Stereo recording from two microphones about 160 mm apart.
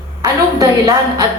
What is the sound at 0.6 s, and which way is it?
Speech, 20° right (ahead or behind).